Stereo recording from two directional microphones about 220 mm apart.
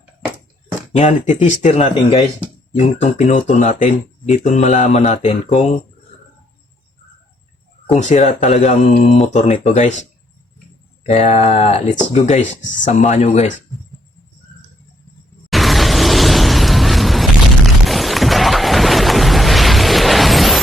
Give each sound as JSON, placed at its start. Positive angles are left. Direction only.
{"t": 0.9, "sound": "speech", "side_deg": 35}
{"t": 7.9, "sound": "speech", "side_deg": 30}
{"t": 15.4, "sound": "mechanisms", "side_deg": 0}
{"t": 17.8, "sound": "a sound", "side_deg": 0}